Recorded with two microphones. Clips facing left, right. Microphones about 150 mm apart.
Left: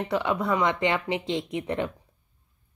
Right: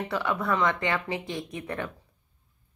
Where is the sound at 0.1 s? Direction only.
20° left (ahead or behind).